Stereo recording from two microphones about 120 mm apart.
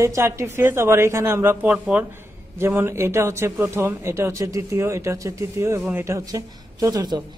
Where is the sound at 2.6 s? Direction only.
20° right (ahead or behind).